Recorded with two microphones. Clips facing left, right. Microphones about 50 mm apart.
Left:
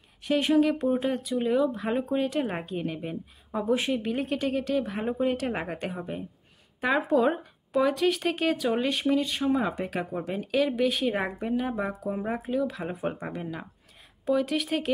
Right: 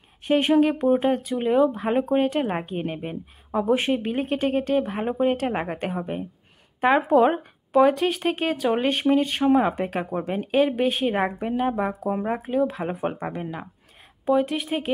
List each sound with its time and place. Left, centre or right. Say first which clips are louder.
0.2 s speech: right 4 dB; right
2.0 s speech: right 6 dB; right
5.5 s speech: right 4 dB; right
5.8 s speech: right 5 dB; right; by 14.9 s centre